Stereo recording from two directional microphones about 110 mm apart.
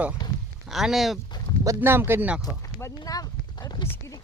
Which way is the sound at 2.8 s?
35° left (ahead or behind).